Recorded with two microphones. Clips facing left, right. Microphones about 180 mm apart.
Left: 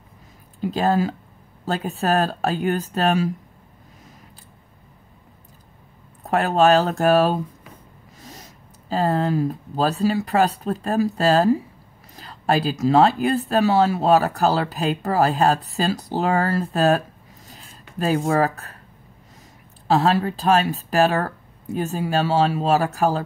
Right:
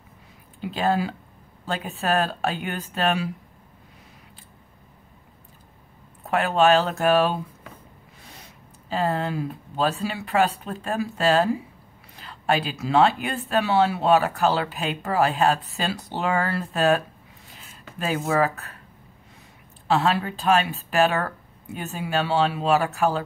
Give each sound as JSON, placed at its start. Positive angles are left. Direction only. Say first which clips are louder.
{"t": 0.6, "sound": "speech", "louder": "left 3 dB", "side_deg": 40}
{"t": 6.2, "sound": "speech", "louder": "left 2 dB", "side_deg": 40}
{"t": 17.5, "sound": "a sound", "louder": "even", "side_deg": 40}
{"t": 19.9, "sound": "speech", "louder": "left 3 dB", "side_deg": 40}